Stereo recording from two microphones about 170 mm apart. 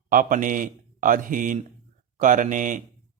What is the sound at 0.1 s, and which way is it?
Speech, 55° right (ahead or behind).